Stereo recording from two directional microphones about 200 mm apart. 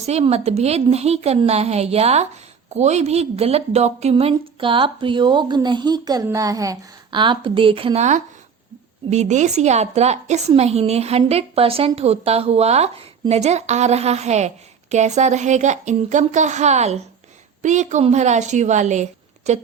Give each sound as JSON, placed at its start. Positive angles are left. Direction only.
{"t": 0.0, "sound": "a woman's voice", "side_deg": -30}